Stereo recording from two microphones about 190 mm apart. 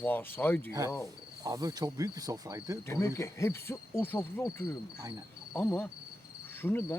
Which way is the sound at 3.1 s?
15° left (ahead or behind).